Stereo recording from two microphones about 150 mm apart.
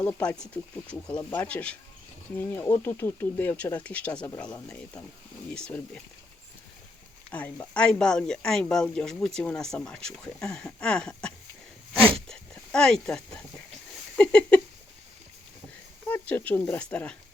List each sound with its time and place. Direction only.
0.0 s speech: 10° left (ahead or behind)
7.3 s speech: 10° left (ahead or behind)
11.9 s speech: 35° right (ahead or behind)
12.3 s speech: 5° left (ahead or behind)
14.2 s a sound: 5° left (ahead or behind)
16.0 s speech: 10° left (ahead or behind)